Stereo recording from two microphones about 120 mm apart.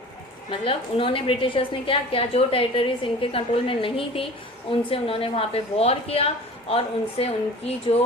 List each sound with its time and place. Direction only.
0.6 s a woman's voice: 45° left (ahead or behind)